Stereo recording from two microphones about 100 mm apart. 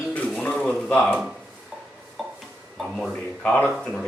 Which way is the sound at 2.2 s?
Centre (ahead or behind).